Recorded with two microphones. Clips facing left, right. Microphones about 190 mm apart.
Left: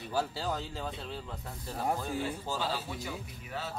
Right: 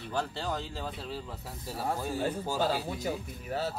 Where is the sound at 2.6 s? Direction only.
45° right (ahead or behind).